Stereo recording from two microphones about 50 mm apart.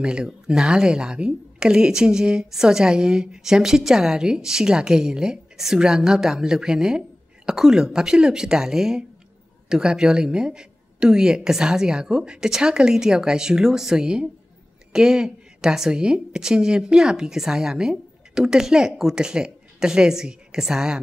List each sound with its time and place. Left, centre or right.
0.0 s a woman's voice: centre